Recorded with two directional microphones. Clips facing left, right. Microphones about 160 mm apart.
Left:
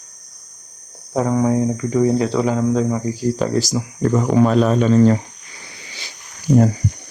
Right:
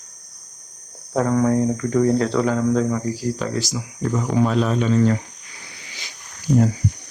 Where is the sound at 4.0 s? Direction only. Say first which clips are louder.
Left 5 dB; 55° left (ahead or behind); by 5.2 s 35° left (ahead or behind).